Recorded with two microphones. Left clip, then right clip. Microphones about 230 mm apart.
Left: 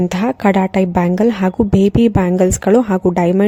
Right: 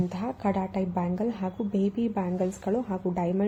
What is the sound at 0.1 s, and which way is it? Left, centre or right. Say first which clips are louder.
A woman's voice: left 15 dB; left.